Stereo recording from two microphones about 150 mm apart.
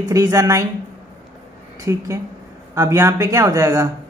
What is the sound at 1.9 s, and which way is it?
Speech, 20° right (ahead or behind).